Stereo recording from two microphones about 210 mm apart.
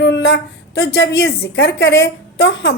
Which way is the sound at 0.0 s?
55° left (ahead or behind).